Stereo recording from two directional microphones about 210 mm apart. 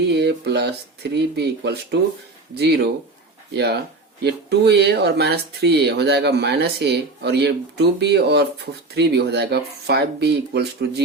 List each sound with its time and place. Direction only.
0.1 s speech: 55° right (ahead or behind)
3.5 s speech: 55° right (ahead or behind)